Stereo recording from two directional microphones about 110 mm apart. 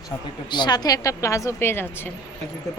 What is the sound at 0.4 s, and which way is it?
Speech, 40° left (ahead or behind).